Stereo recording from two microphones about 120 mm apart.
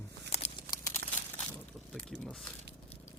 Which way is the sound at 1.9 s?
5° left (ahead or behind).